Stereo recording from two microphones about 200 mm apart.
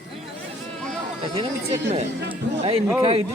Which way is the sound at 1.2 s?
25° right (ahead or behind).